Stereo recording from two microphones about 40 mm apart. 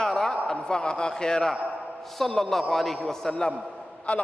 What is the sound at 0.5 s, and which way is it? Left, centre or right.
A man's voice, left.